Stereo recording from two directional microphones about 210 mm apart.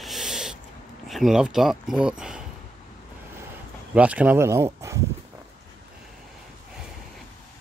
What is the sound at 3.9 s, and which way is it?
Speech, 5° right (ahead or behind).